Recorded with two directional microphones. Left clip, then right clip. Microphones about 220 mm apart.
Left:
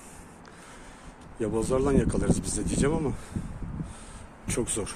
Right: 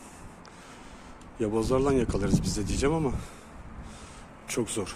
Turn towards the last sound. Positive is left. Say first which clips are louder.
# even
turn(degrees=0)  # may be behind; listen again after turning